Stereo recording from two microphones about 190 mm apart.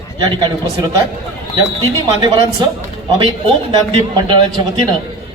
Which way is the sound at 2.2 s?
20° right (ahead or behind).